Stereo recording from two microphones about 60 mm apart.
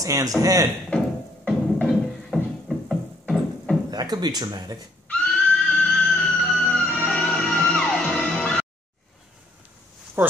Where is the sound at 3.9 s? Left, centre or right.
Right.